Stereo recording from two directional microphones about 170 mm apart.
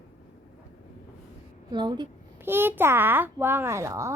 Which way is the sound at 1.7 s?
25° right (ahead or behind).